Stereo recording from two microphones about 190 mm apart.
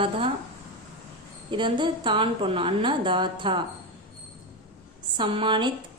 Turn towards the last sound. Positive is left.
turn(degrees=-25)  # may be behind; listen again after turning